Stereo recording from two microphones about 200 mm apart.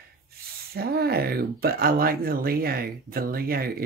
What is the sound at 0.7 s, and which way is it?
Speech, 50° right (ahead or behind).